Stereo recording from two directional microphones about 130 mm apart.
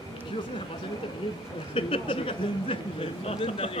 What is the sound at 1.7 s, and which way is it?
Speech, 45° left (ahead or behind).